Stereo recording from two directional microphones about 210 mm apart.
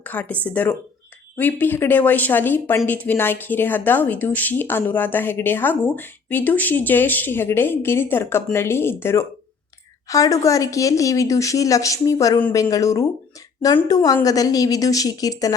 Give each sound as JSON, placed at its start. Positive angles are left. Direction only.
{"t": 0.0, "sound": "speech", "side_deg": 10}